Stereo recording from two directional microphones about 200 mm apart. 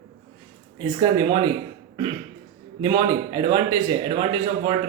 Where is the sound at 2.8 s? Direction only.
25° right (ahead or behind).